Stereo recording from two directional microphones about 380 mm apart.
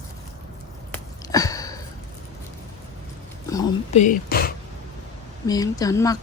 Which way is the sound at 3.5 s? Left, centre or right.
Centre.